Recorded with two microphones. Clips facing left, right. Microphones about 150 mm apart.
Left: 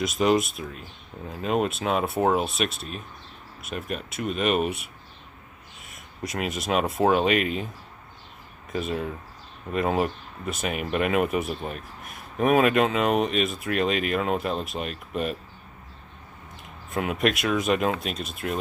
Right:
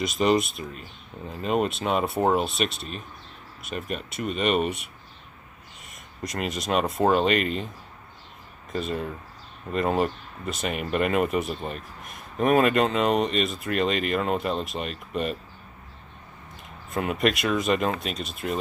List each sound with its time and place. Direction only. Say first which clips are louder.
0.0 s speech: even; centre (ahead or behind)
8.7 s speech: left 1 dB; centre (ahead or behind)
16.9 s speech: even; centre (ahead or behind)